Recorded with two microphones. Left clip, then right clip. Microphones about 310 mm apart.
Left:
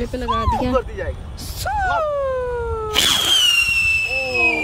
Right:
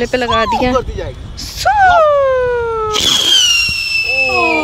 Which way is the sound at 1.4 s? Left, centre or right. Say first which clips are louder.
Right 12 dB; centre.